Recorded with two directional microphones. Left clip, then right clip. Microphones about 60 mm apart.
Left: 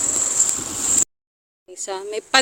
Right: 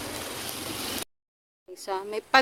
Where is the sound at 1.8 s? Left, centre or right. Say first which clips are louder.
Left 4 dB; left.